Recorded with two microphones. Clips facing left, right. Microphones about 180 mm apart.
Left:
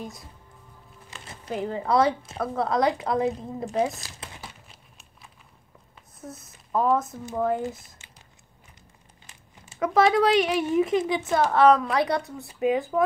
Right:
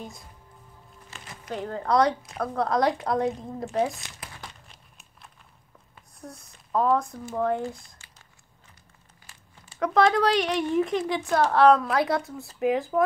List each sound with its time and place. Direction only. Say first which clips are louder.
0.0 s speech: left 3 dB; centre (ahead or behind)
1.1 s a sound: left 1 dB; 15° left (ahead or behind)
1.5 s speech: left 1 dB; 5° left (ahead or behind)
4.0 s crumpling: left 1 dB; 25° left (ahead or behind)
6.2 s speech: left 2 dB; 5° left (ahead or behind)
7.6 s speech: left 2 dB; 20° left (ahead or behind)
9.2 s a sound: left 2 dB; 20° left (ahead or behind)
9.8 s speech: left 1 dB; 5° left (ahead or behind)